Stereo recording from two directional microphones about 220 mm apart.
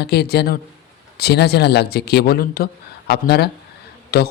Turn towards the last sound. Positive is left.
turn(degrees=45)  # may be behind; listen again after turning